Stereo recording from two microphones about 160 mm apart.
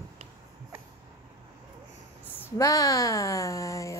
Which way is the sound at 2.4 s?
20° left (ahead or behind).